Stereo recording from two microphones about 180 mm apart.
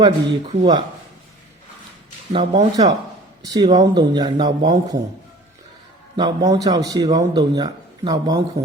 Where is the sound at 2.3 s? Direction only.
35° right (ahead or behind).